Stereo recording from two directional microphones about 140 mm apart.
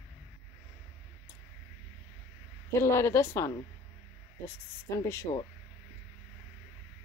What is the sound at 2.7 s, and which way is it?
Speech, 20° left (ahead or behind).